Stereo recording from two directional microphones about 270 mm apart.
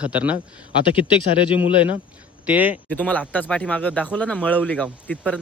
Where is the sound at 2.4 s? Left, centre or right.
Centre.